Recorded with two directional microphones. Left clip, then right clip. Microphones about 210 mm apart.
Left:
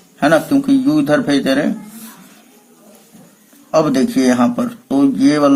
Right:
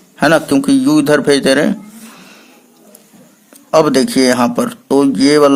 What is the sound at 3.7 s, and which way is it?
Speech, 45° right (ahead or behind).